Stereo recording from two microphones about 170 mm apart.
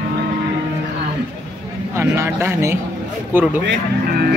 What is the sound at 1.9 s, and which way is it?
Speech, 15° right (ahead or behind).